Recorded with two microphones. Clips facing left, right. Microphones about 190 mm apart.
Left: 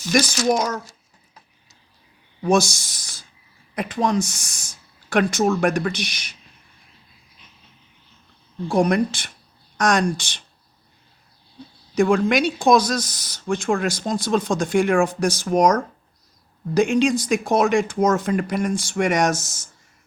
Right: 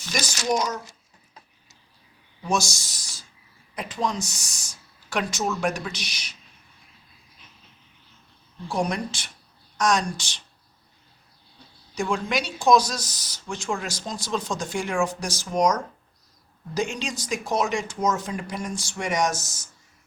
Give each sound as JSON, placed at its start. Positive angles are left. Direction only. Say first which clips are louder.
{"t": 0.1, "sound": "speech", "louder": "left 7 dB", "side_deg": 55}
{"t": 2.4, "sound": "speech", "louder": "left 8 dB", "side_deg": 55}
{"t": 8.7, "sound": "speech", "louder": "left 8 dB", "side_deg": 55}
{"t": 11.9, "sound": "speech", "louder": "left 9 dB", "side_deg": 55}